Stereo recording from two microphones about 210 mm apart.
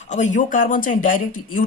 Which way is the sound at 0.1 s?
35° left (ahead or behind).